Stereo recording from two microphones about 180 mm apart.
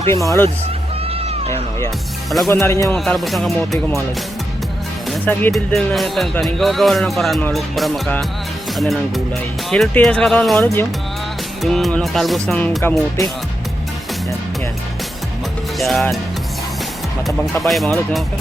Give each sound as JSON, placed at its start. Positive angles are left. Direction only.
{"t": 0.1, "sound": "speech", "side_deg": 15}
{"t": 2.5, "sound": "speech", "side_deg": 15}
{"t": 2.9, "sound": "speech", "side_deg": 0}
{"t": 5.1, "sound": "speech", "side_deg": 10}
{"t": 15.8, "sound": "speech", "side_deg": 0}
{"t": 17.6, "sound": "speech", "side_deg": 0}